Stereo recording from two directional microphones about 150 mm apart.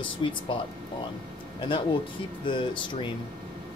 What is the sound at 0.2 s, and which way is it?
Speech, 35° left (ahead or behind).